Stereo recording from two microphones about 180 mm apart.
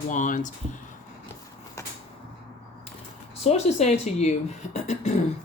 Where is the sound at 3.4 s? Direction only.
35° left (ahead or behind).